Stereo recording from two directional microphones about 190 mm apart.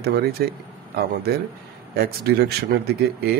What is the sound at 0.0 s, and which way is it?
Speech, 55° right (ahead or behind).